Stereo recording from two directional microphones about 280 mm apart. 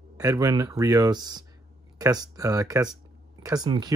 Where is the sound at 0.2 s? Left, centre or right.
Centre.